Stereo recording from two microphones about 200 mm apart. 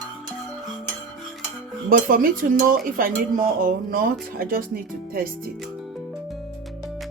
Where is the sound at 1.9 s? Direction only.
45° right (ahead or behind).